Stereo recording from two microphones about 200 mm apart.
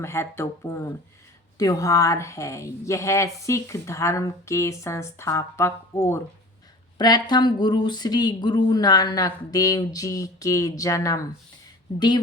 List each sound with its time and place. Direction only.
0.0 s speech: 10° left (ahead or behind)